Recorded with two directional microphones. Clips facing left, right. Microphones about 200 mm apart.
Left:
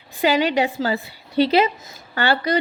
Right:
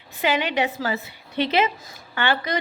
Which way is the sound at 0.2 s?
35° left (ahead or behind).